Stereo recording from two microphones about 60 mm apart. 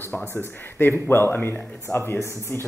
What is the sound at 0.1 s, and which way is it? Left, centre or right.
Speech, left.